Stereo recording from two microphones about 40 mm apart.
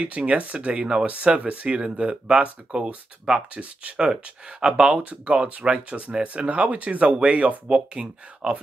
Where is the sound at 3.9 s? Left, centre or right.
Right.